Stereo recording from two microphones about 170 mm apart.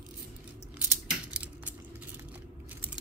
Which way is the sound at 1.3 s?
10° right (ahead or behind).